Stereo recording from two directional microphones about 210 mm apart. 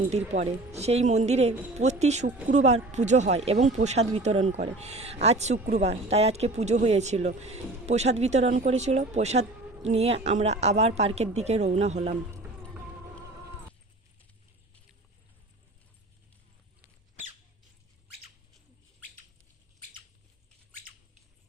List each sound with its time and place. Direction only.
0.8 s speech: 30° right (ahead or behind)